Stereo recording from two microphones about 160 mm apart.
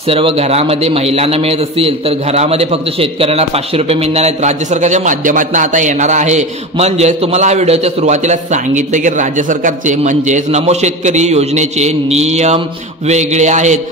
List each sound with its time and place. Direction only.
0.1 s a man's voice: 35° right (ahead or behind)